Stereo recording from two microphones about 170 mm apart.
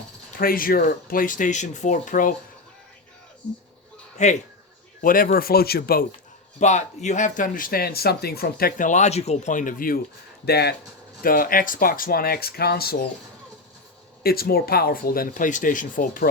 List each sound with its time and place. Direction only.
0.3 s speech: 55° left (ahead or behind)
4.2 s speech: 45° left (ahead or behind)
4.9 s speech: 55° left (ahead or behind)
6.6 s speech: 45° left (ahead or behind)
10.4 s speech: 70° left (ahead or behind)
11.2 s speech: 55° left (ahead or behind)
14.3 s speech: 65° left (ahead or behind)